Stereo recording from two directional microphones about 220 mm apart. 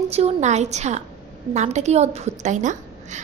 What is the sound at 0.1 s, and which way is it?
A woman's voice, 30° right (ahead or behind).